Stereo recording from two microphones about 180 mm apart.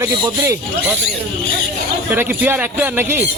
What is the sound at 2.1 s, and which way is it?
Speech, 10° right (ahead or behind).